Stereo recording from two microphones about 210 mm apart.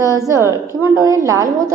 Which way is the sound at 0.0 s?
15° right (ahead or behind).